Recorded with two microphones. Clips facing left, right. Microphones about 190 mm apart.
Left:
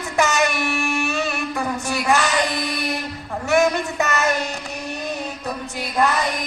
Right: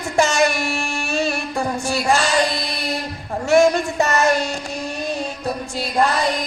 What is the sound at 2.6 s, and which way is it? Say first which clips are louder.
Music: left 1 dB; 35° right (ahead or behind).